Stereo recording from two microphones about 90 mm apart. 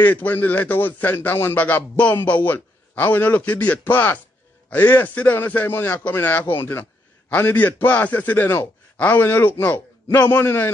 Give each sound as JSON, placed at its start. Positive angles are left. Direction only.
{"t": 0.0, "sound": "a man's voice", "side_deg": 20}